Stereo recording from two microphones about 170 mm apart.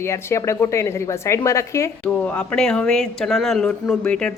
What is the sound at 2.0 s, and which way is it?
Speech, 5° left (ahead or behind).